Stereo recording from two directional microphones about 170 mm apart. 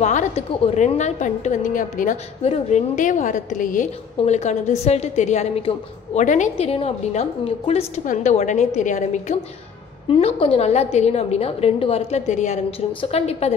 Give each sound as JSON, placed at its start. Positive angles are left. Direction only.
{"t": 0.0, "sound": "a sound", "side_deg": 45}
{"t": 0.7, "sound": "a woman's voice", "side_deg": 45}
{"t": 10.0, "sound": "a woman's voice", "side_deg": 35}